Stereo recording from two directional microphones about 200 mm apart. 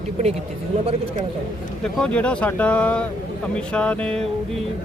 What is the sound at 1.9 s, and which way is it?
Speech, 5° left (ahead or behind).